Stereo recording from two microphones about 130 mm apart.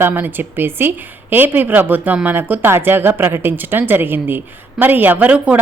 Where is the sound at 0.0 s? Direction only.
15° right (ahead or behind).